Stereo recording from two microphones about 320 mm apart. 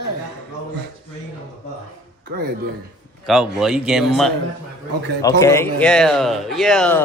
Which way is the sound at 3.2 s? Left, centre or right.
Centre.